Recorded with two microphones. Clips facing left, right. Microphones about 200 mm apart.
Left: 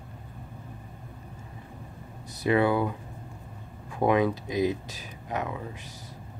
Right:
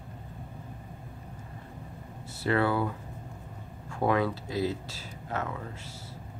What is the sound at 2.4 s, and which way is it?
Speech, 15° left (ahead or behind).